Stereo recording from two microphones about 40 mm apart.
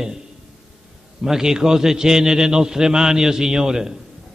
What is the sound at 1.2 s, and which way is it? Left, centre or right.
A man's voice, centre.